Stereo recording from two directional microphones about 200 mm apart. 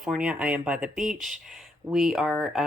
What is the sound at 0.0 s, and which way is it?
Speech, 5° right (ahead or behind).